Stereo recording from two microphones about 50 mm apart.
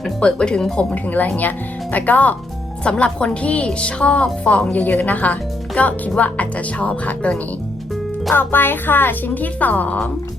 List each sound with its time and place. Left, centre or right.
0.2 s a woman's voice: centre
2.8 s a woman's voice: left
8.4 s speech: left